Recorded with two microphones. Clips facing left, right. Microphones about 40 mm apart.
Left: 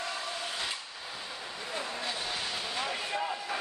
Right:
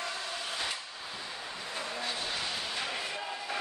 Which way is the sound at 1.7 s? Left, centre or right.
Centre.